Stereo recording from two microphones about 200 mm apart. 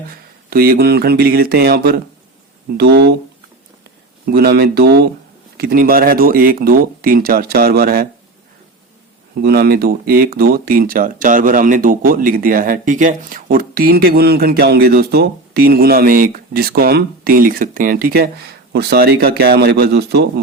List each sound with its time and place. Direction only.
0.5 s speech: 50° right (ahead or behind)
4.3 s speech: 50° right (ahead or behind)
9.4 s speech: 55° right (ahead or behind)